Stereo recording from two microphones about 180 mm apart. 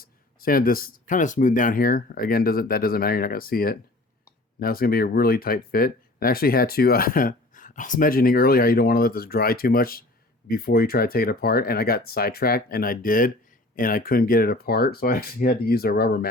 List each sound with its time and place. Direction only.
0.0 s speech: 55° left (ahead or behind)